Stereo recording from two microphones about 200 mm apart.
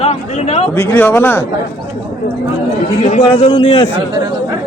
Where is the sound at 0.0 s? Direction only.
30° left (ahead or behind).